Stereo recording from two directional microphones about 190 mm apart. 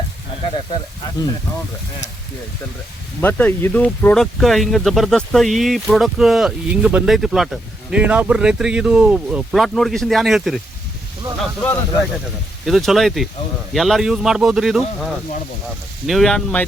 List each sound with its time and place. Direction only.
0.4 s speech: 25° left (ahead or behind)
3.2 s speech: 10° left (ahead or behind)
11.3 s speech: 10° left (ahead or behind)
12.6 s speech: centre (ahead or behind)